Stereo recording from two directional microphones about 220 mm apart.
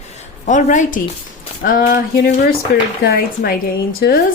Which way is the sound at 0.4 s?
35° left (ahead or behind).